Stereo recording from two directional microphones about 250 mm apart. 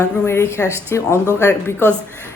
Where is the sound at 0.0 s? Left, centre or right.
Centre.